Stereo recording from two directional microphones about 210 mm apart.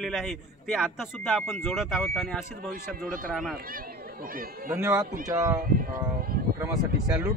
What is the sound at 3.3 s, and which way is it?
Speech, centre (ahead or behind).